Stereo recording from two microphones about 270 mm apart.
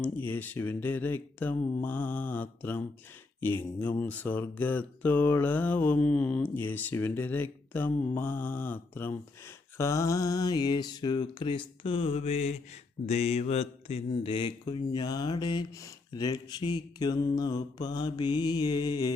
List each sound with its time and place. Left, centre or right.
0.0 s speech: centre